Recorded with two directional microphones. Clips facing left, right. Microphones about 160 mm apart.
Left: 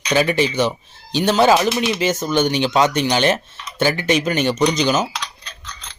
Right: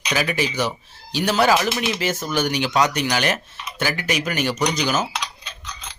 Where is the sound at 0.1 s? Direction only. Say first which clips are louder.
Left 6 dB; 25° left (ahead or behind).